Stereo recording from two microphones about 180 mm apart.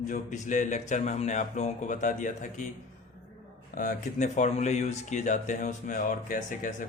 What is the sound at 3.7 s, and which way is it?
Speech, 50° left (ahead or behind).